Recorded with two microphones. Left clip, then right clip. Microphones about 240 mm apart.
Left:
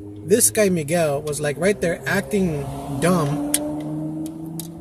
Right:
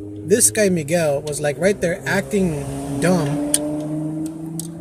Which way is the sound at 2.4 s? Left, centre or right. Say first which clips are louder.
Right 2 dB; right.